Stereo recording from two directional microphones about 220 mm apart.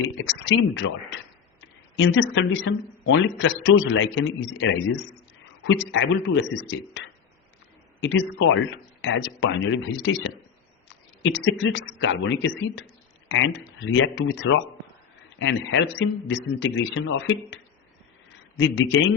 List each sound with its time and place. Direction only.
0.2 s a man's voice: 60° left (ahead or behind)
8.0 s speech: 55° left (ahead or behind)